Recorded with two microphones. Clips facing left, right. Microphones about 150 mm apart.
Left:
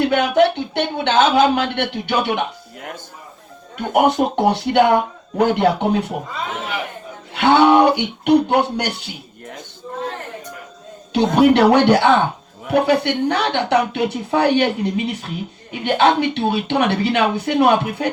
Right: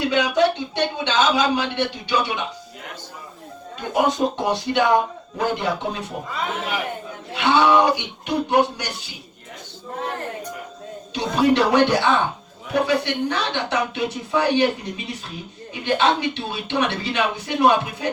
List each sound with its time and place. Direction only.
0.0 s speech: 55° left (ahead or behind)
7.3 s speech: 60° left (ahead or behind)
11.1 s speech: 65° left (ahead or behind)